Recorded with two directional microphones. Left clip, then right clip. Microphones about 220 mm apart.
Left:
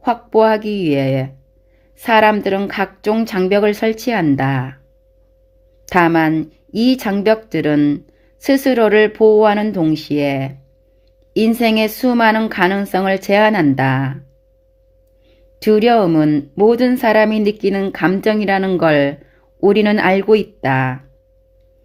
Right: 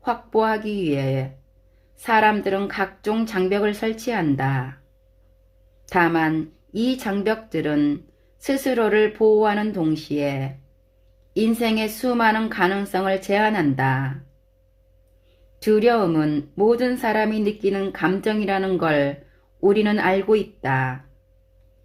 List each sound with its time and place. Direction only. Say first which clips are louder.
0.0 s speech: left 8 dB; 30° left (ahead or behind)
5.8 s speech: left 6 dB; 35° left (ahead or behind)
15.5 s speech: left 6 dB; 30° left (ahead or behind)